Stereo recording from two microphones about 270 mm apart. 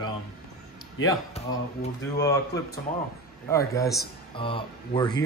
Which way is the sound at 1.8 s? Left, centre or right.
Left.